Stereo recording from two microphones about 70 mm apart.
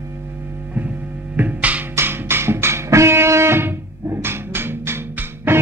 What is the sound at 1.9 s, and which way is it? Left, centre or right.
Music, right.